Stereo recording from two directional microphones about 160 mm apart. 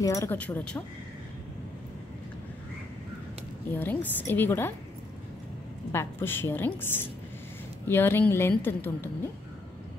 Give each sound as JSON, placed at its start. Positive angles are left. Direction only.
{"t": 0.0, "sound": "speech", "side_deg": 20}
{"t": 0.4, "sound": "a woman's voice", "side_deg": 10}
{"t": 3.7, "sound": "a woman's voice", "side_deg": 10}
{"t": 5.9, "sound": "a woman's voice", "side_deg": 15}